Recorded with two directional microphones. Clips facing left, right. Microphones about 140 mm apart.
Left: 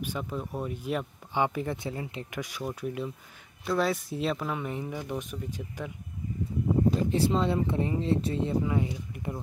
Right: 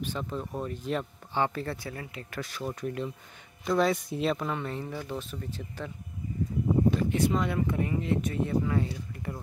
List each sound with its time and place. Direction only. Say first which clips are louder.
0.0 s speech: even; 10° left (ahead or behind)
7.0 s speech: left 1 dB; 30° left (ahead or behind)